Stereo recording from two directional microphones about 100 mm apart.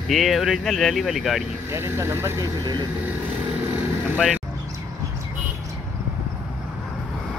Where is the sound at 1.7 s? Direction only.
25° right (ahead or behind).